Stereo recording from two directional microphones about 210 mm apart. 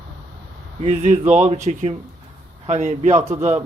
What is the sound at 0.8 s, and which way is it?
A man's voice, 30° right (ahead or behind).